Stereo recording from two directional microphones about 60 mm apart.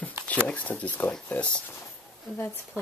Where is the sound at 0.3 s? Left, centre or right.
Left.